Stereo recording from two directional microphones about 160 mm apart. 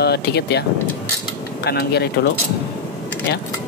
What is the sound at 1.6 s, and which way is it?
Speech, 90° left.